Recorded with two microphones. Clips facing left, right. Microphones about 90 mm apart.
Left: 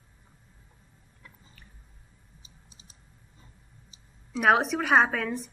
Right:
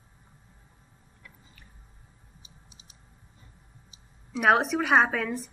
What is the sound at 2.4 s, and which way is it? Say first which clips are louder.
Typing: right 1 dB; 35° left (ahead or behind).